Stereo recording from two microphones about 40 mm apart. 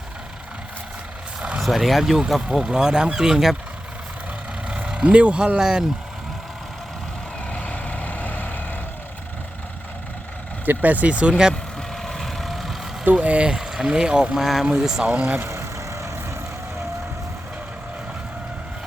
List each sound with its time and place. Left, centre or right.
1.4 s vehicle: right
1.6 s speech: centre
2.6 s speech: centre
4.9 s speech: right
7.4 s vehicle: left
10.7 s speech: right
12.0 s vehicle: centre
13.2 s speech: right
13.5 s boat: centre
13.8 s speech: right
14.3 s speech: centre
14.8 s speech: centre
15.0 s speech: right